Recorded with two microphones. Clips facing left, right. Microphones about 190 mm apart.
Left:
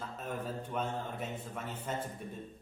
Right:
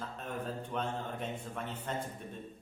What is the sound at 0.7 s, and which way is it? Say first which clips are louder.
A man's voice: even; 5° left (ahead or behind).